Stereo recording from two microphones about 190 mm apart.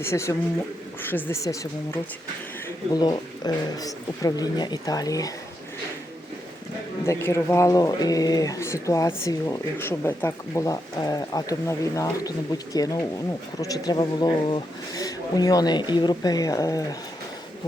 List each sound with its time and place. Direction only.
0.0 s speech: 15° left (ahead or behind)
7.0 s speech: 15° left (ahead or behind)